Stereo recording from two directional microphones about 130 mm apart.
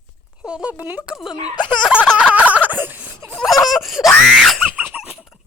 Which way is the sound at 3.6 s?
Centre (ahead or behind).